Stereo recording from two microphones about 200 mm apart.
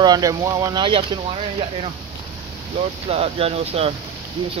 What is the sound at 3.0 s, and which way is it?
Speech, 30° right (ahead or behind).